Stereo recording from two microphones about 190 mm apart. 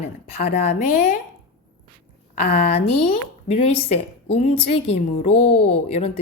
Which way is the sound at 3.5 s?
35° left (ahead or behind).